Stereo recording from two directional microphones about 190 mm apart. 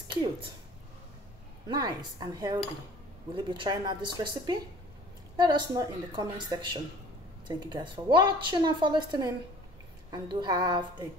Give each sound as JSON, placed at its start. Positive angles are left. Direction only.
{"t": 1.7, "sound": "a woman's voice", "side_deg": -20}